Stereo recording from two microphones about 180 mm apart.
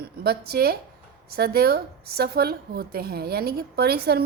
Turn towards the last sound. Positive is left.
turn(degrees=-60)  # may be behind; listen again after turning